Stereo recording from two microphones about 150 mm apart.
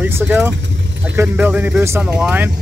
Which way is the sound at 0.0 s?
10° right (ahead or behind).